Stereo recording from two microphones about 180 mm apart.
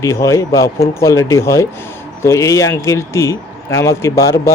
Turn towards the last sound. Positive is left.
turn(degrees=15)  # may be behind; listen again after turning